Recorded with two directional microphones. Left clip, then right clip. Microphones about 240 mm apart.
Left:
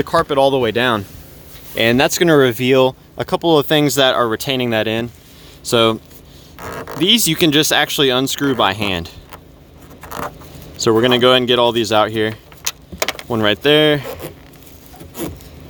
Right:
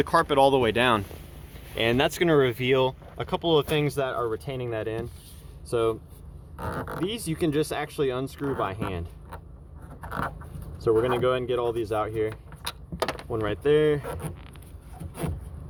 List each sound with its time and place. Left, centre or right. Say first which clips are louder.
0.0 s speech: left 6 dB; left
1.7 s speech: left 10 dB; left
7.0 s speech: left 17 dB; left
10.8 s speech: left 10 dB; left
13.3 s speech: left 10 dB; left